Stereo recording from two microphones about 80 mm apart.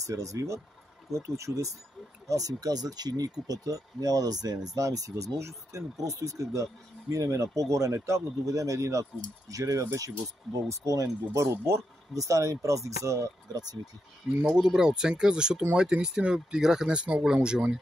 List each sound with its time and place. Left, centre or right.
0.0 s speech: right
13.5 s speech: right
14.5 s speech: centre